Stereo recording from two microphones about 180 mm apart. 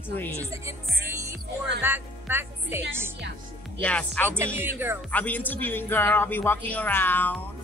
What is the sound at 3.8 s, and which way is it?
Speech, 5° left (ahead or behind).